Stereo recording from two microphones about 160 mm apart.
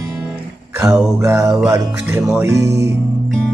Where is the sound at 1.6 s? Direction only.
15° right (ahead or behind).